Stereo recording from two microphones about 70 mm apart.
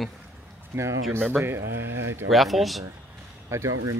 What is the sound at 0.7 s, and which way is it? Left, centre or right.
Speech, right.